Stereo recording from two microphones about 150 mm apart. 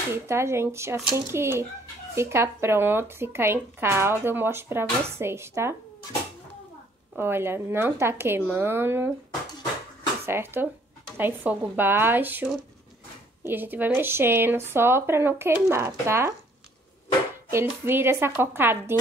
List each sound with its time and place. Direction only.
0.1 s speech: 15° right (ahead or behind)
7.2 s speech: 15° right (ahead or behind)
10.2 s speech: 15° right (ahead or behind)
17.8 s speech: 15° right (ahead or behind)